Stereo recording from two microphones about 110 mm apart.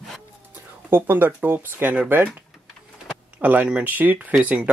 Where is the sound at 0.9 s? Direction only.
20° right (ahead or behind).